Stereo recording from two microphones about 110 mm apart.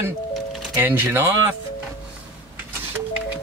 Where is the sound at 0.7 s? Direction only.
15° right (ahead or behind).